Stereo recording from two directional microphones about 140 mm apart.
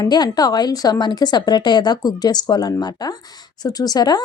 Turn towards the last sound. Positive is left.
turn(degrees=30)  # may be behind; listen again after turning